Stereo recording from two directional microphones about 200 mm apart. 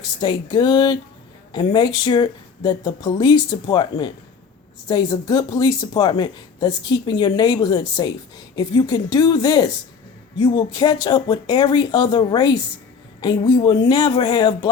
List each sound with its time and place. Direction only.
0.0 s speech: 20° left (ahead or behind)